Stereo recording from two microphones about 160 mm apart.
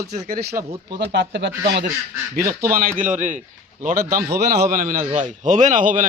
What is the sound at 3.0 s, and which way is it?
Speech, 50° right (ahead or behind).